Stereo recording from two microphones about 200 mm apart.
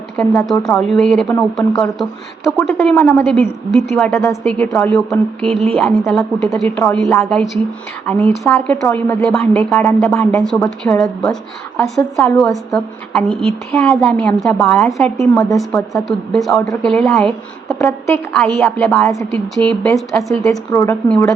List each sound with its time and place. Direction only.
0.2 s a woman's voice: 5° left (ahead or behind)
20.7 s a woman's voice: 10° left (ahead or behind)